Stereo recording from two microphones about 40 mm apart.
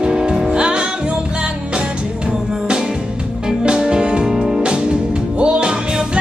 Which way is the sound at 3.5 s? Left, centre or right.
Centre.